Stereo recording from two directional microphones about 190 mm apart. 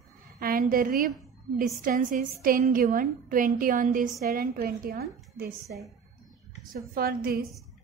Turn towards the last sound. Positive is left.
turn(degrees=-50)  # may be behind; listen again after turning